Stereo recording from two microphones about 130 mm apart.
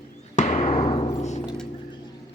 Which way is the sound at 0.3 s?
55° left (ahead or behind).